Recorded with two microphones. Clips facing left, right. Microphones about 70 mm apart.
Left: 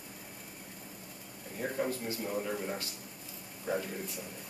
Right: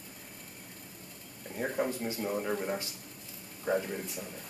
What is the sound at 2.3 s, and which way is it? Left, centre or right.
Speech, centre.